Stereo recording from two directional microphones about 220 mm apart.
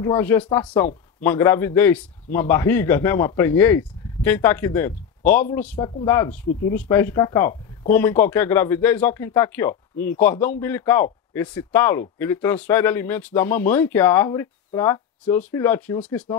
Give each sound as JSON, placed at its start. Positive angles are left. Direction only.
{"t": 0.0, "sound": "speech", "side_deg": 10}
{"t": 6.4, "sound": "speech", "side_deg": 45}
{"t": 6.7, "sound": "speech", "side_deg": 10}